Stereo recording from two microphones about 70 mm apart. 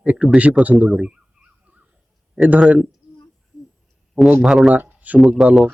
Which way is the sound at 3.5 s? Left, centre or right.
Left.